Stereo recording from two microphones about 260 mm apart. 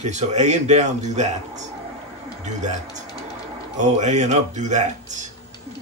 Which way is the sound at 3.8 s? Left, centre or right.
Right.